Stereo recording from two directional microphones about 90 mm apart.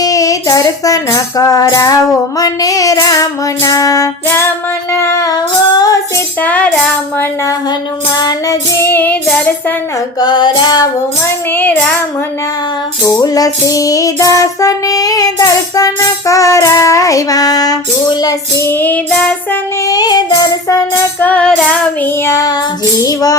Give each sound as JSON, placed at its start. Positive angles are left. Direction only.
{"t": 0.0, "sound": "music", "side_deg": 40}
{"t": 5.2, "sound": "female singing", "side_deg": 45}
{"t": 6.4, "sound": "music", "side_deg": 15}
{"t": 8.1, "sound": "music", "side_deg": 50}
{"t": 8.8, "sound": "child singing", "side_deg": 20}
{"t": 10.2, "sound": "music", "side_deg": 50}
{"t": 11.5, "sound": "child singing", "side_deg": 20}
{"t": 13.2, "sound": "music", "side_deg": 45}
{"t": 18.6, "sound": "child singing", "side_deg": 20}
{"t": 19.9, "sound": "music", "side_deg": 45}
{"t": 21.2, "sound": "music", "side_deg": 20}
{"t": 22.3, "sound": "music", "side_deg": 40}